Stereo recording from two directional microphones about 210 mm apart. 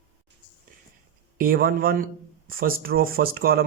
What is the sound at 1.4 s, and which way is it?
Speech, 45° right (ahead or behind).